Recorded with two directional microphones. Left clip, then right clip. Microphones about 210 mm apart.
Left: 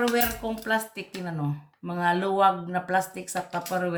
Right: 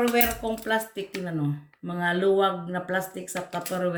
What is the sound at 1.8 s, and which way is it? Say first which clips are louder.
Speech: right 1 dB; 25° left (ahead or behind).